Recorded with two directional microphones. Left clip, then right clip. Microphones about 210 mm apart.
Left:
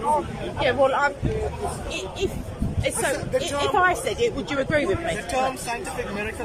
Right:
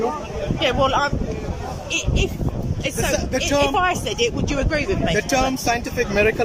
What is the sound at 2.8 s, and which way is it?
Speech, centre (ahead or behind).